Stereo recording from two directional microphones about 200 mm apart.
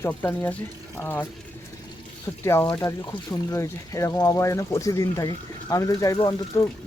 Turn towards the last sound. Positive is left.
turn(degrees=20)  # may be behind; listen again after turning